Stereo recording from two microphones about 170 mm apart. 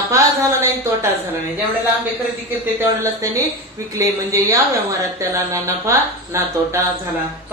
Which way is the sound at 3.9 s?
20° right (ahead or behind).